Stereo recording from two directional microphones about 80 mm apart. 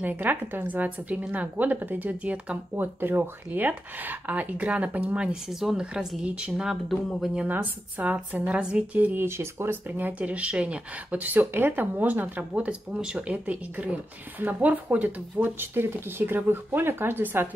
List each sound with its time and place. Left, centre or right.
0.0 s a woman's voice: right; by 7.0 s centre
7.4 s a woman's voice: right